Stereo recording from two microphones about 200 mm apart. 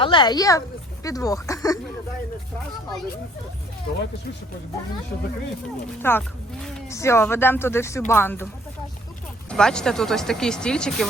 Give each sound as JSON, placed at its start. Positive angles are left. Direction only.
{"t": 0.0, "sound": "speech", "side_deg": 25}
{"t": 6.0, "sound": "speech", "side_deg": 10}
{"t": 9.5, "sound": "speech", "side_deg": 5}